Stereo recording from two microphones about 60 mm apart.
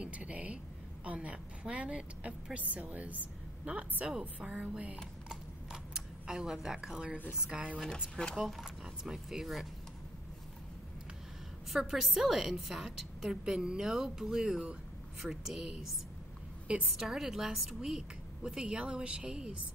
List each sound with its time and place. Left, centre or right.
0.0 s a woman's voice: right; by 9.7 s centre
11.7 s a woman's voice: centre
16.6 s a woman's voice: centre
16.9 s a woman's voice: centre